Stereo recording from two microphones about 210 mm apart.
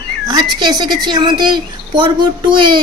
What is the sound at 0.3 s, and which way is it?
Speech, 20° right (ahead or behind).